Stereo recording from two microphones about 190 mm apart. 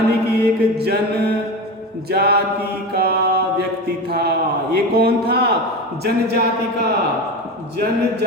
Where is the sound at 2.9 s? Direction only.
55° right (ahead or behind).